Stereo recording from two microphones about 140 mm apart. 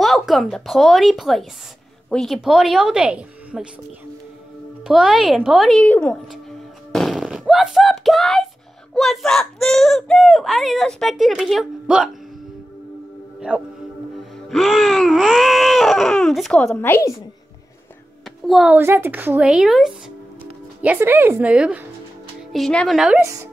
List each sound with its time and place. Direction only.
0.0 s speech: centre (ahead or behind)
4.8 s speech: 5° right (ahead or behind)
6.9 s fart: centre (ahead or behind)
8.9 s speech: centre (ahead or behind)
13.5 s speech: 10° right (ahead or behind)
14.5 s baby cry: centre (ahead or behind)
16.8 s a woman's voice: 15° left (ahead or behind)
18.2 s a sound: 5° right (ahead or behind)
18.8 s speech: 15° right (ahead or behind)
22.5 s speech: 5° left (ahead or behind)
23.2 s a woman's voice: 20° right (ahead or behind)